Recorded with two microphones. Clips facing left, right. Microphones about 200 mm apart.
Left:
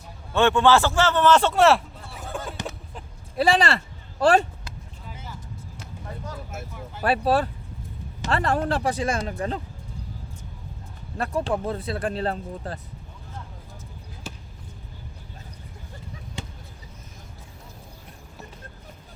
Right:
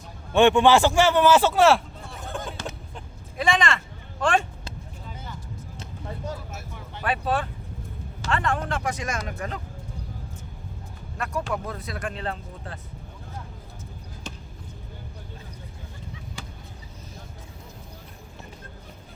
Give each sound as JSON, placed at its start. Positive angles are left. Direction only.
{"t": 0.3, "sound": "a man's voice", "side_deg": -15}
{"t": 3.3, "sound": "speech", "side_deg": 35}
{"t": 7.0, "sound": "speech", "side_deg": 40}
{"t": 11.2, "sound": "speech", "side_deg": 30}
{"t": 14.3, "sound": "basketball bounce", "side_deg": 5}
{"t": 16.4, "sound": "a sound", "side_deg": 25}